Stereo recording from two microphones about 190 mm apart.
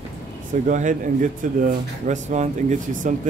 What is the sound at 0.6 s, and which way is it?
Speech, 40° right (ahead or behind).